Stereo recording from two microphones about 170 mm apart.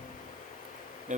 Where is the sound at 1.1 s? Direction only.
45° right (ahead or behind).